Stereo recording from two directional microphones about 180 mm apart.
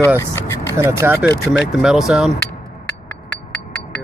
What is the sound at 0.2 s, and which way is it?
Speech, 20° left (ahead or behind).